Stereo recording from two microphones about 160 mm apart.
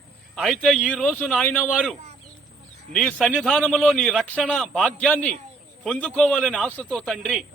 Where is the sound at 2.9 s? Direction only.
5° left (ahead or behind).